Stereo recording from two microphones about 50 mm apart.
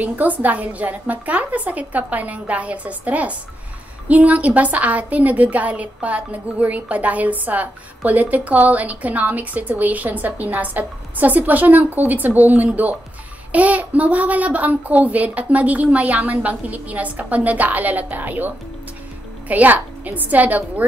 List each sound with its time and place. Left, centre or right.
0.0 s a woman's voice: right